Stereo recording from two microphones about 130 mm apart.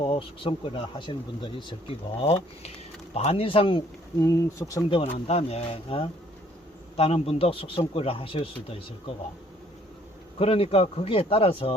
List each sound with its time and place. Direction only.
0.0 s a man's voice: 40° left (ahead or behind)
4.2 s speech: 20° left (ahead or behind)
5.1 s a man's voice: 50° left (ahead or behind)
10.3 s a man's voice: 45° left (ahead or behind)